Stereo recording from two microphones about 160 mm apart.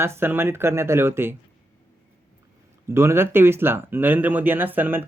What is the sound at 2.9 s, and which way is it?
Speech, 15° right (ahead or behind).